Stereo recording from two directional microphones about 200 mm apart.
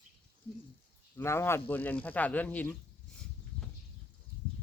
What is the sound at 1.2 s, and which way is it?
Speech, 10° left (ahead or behind).